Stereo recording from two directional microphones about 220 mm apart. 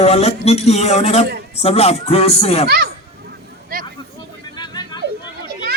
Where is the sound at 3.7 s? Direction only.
40° right (ahead or behind).